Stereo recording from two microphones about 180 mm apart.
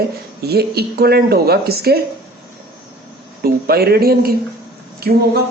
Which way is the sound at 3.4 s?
60° right (ahead or behind).